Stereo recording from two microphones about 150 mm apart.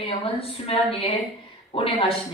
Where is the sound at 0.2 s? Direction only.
40° left (ahead or behind).